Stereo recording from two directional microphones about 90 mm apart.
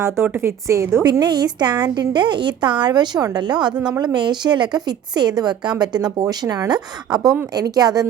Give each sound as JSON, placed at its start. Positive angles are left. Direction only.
{"t": 0.3, "sound": "a woman's voice", "side_deg": -30}
{"t": 1.2, "sound": "a woman's voice", "side_deg": -50}